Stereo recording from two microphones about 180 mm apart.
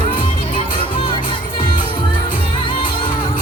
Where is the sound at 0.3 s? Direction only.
30° left (ahead or behind).